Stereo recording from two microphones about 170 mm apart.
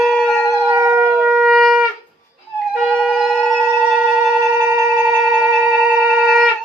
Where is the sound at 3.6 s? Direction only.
5° right (ahead or behind).